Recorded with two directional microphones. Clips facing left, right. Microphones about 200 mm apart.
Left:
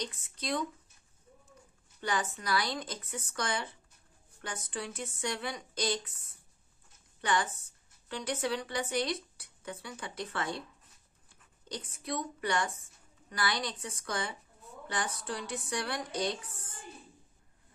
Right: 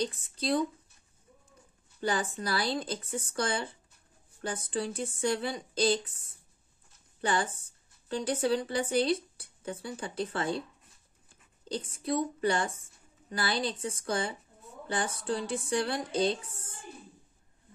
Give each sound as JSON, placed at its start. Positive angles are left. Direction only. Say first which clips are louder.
{"t": 0.0, "sound": "speech", "louder": "right 7 dB", "side_deg": -30}
{"t": 2.0, "sound": "speech", "louder": "right 3 dB", "side_deg": -30}
{"t": 11.7, "sound": "speech", "louder": "right 6 dB", "side_deg": -30}